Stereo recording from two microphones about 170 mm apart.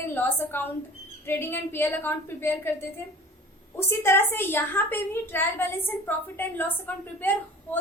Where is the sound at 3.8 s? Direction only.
15° left (ahead or behind).